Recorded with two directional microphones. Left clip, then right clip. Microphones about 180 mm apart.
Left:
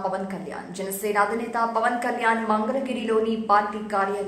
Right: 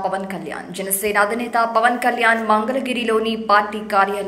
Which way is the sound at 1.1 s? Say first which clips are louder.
Right 5 dB; 15° right (ahead or behind).